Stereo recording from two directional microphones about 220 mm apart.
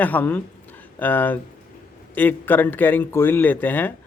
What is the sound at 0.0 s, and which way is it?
Speech, 10° left (ahead or behind).